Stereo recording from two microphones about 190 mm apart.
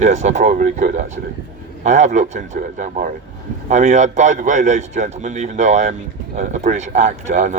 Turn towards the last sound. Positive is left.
turn(degrees=-40)  # may be behind; listen again after turning